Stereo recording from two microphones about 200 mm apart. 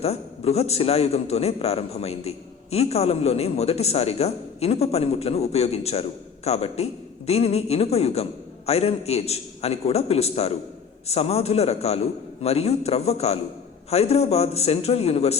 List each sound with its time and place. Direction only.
0.0 s a man's voice: 30° left (ahead or behind)